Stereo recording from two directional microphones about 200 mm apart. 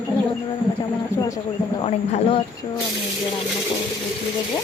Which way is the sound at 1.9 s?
30° left (ahead or behind).